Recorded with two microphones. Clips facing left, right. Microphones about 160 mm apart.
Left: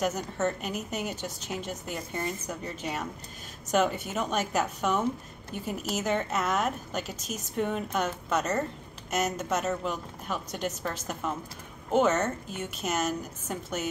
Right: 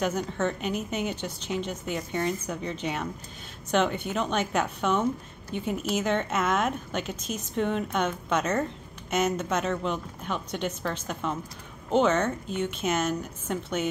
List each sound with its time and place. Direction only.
0.0 s a woman's voice: 5° left (ahead or behind)
1.1 s a woman's voice: 45° left (ahead or behind)
1.7 s a woman's voice: centre (ahead or behind)